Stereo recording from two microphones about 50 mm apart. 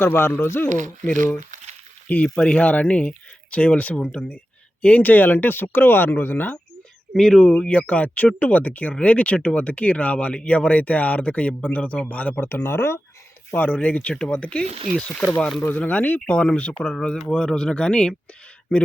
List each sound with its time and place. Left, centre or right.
0.0 s speech: left
2.0 s speech: left
7.1 s speech: centre
7.6 s speech: left
12.5 s speech: left
13.8 s speech: left
15.1 s speech: centre
15.8 s speech: left; by 18.1 s centre